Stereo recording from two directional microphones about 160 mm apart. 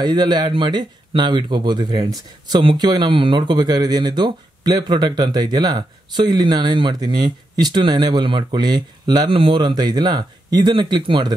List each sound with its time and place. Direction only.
0.0 s speech: 25° right (ahead or behind)